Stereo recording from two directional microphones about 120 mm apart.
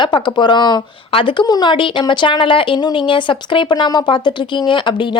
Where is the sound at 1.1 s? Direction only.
45° left (ahead or behind).